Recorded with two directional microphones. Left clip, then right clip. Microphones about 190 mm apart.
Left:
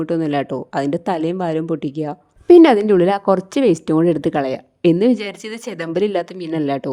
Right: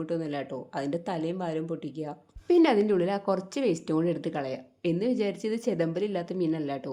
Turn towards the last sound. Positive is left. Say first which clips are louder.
# left 9 dB
turn(degrees=55)  # may be behind; listen again after turning